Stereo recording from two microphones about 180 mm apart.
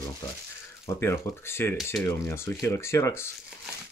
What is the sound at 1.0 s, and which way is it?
Speech, 15° left (ahead or behind).